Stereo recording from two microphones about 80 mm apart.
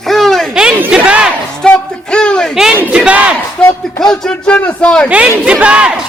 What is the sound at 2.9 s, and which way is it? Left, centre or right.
Speech, centre.